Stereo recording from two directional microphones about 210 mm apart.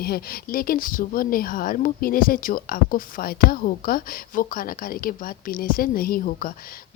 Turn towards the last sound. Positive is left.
turn(degrees=40)  # may be behind; listen again after turning